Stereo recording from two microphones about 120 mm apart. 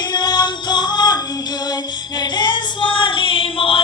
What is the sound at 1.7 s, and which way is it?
Female singing, 35° left (ahead or behind).